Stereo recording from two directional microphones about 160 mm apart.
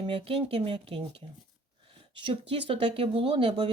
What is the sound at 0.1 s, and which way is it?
Speech, 35° right (ahead or behind).